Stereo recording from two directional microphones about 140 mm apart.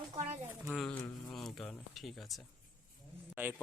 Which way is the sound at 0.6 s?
Centre (ahead or behind).